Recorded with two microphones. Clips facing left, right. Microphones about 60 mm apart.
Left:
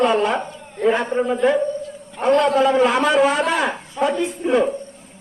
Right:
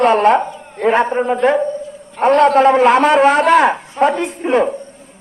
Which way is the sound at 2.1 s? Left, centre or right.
Right.